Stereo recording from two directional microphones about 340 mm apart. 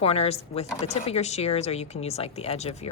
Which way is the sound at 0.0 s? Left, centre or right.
Centre.